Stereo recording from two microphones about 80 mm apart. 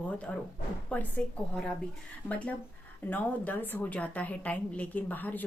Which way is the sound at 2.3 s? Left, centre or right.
Centre.